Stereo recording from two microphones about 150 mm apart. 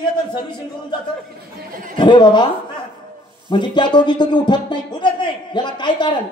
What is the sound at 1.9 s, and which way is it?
Speech, 30° left (ahead or behind).